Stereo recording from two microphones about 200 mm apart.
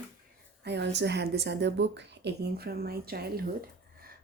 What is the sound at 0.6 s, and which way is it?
A woman's voice, 60° right (ahead or behind).